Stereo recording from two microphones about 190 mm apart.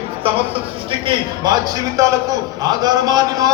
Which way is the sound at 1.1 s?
20° right (ahead or behind).